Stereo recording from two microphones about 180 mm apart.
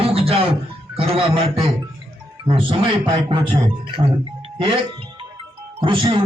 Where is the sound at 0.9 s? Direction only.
30° right (ahead or behind).